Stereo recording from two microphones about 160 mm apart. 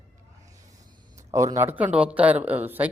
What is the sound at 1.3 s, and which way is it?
Speech, 20° right (ahead or behind).